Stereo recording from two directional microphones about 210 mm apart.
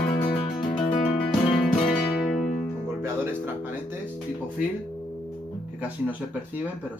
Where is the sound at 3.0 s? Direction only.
10° right (ahead or behind).